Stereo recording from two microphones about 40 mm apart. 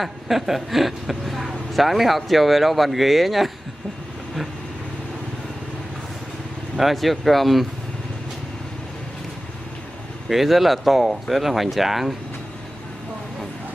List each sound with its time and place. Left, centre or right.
0.0 s speech: centre
6.8 s speech: centre
10.2 s speech: centre